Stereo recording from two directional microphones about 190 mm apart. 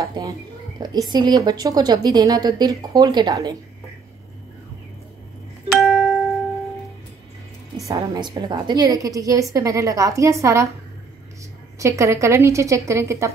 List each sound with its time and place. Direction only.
0.0 s a woman's voice: 20° right (ahead or behind)
5.8 s music: centre (ahead or behind)
7.9 s a woman's voice: 20° right (ahead or behind)
11.8 s a woman's voice: 15° right (ahead or behind)